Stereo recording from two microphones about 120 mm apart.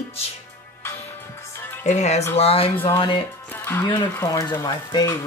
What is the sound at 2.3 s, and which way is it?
Speech, 55° left (ahead or behind).